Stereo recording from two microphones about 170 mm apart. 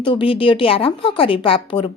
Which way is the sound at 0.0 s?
30° left (ahead or behind).